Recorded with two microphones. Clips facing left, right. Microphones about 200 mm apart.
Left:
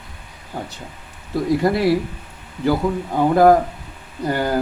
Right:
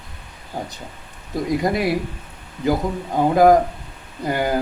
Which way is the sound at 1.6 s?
15° right (ahead or behind).